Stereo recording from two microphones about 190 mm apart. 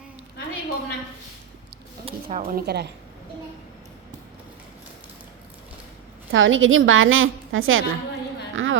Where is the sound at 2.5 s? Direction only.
55° right (ahead or behind).